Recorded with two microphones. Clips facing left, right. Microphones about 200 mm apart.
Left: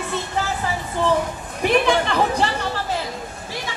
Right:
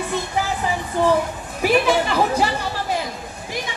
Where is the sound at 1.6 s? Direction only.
5° right (ahead or behind).